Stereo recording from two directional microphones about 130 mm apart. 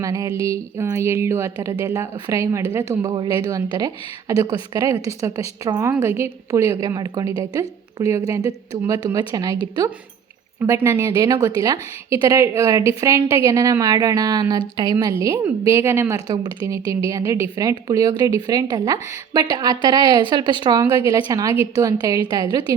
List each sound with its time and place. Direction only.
0.0 s a woman's voice: 30° right (ahead or behind)
3.1 s a woman's voice: 35° right (ahead or behind)
10.7 s speech: 20° right (ahead or behind)
11.0 s a woman's voice: 30° right (ahead or behind)